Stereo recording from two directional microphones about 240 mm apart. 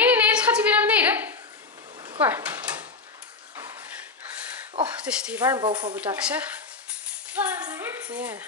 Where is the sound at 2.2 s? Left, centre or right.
Centre.